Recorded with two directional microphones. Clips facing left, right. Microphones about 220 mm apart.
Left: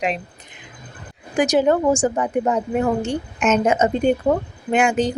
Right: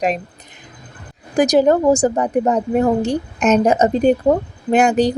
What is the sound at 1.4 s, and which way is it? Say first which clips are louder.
A woman's voice: right 4 dB; 40° right (ahead or behind).